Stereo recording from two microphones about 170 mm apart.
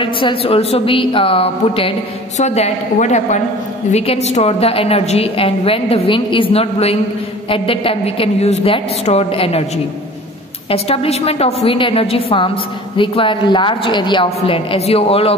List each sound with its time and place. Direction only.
0.0 s a woman's voice: 30° left (ahead or behind)
10.7 s a woman's voice: 35° left (ahead or behind)